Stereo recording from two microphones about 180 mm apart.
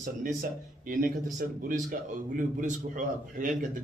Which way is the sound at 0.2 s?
50° right (ahead or behind).